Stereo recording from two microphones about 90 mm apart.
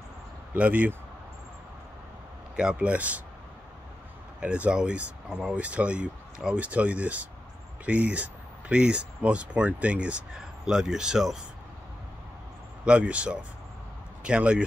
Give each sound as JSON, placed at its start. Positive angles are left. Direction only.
{"t": 0.6, "sound": "speech", "side_deg": -15}
{"t": 2.5, "sound": "speech", "side_deg": -10}
{"t": 4.4, "sound": "speech", "side_deg": -10}
{"t": 12.8, "sound": "speech", "side_deg": -15}